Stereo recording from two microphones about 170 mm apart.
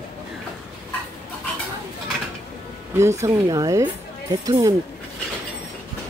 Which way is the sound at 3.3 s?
20° right (ahead or behind).